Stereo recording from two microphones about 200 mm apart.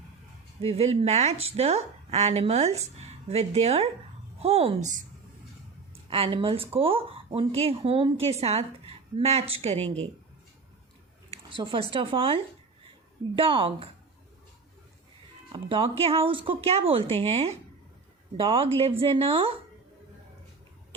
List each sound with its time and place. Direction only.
0.6 s a woman's voice: 30° right (ahead or behind)
5.9 s a woman's voice: 30° right (ahead or behind)
11.5 s a woman's voice: 25° right (ahead or behind)
15.5 s a woman's voice: 25° right (ahead or behind)